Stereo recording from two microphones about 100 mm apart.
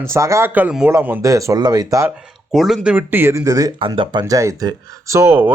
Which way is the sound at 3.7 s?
60° right (ahead or behind).